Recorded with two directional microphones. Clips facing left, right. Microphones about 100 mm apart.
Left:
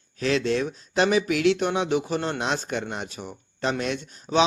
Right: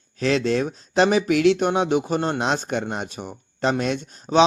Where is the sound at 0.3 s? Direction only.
25° right (ahead or behind).